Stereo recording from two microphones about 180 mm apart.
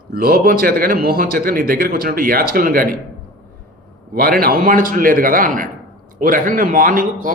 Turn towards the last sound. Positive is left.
turn(degrees=-50)  # may be behind; listen again after turning